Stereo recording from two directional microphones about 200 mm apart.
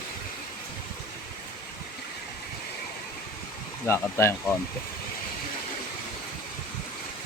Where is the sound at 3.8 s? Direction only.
10° left (ahead or behind).